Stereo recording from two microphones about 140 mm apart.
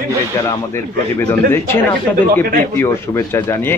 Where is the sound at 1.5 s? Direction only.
15° left (ahead or behind).